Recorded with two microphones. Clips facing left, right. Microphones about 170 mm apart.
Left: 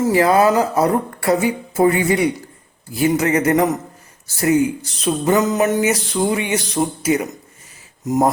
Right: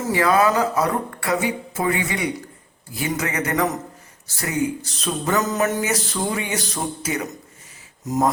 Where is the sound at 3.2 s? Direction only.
30° left (ahead or behind).